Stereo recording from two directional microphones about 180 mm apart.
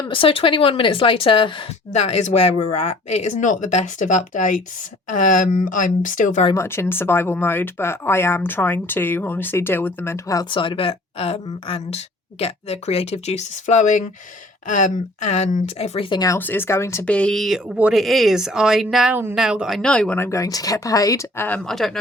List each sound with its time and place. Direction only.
0.0 s a woman's voice: 30° left (ahead or behind); by 6.4 s 45° left (ahead or behind)
6.6 s speech: 15° left (ahead or behind)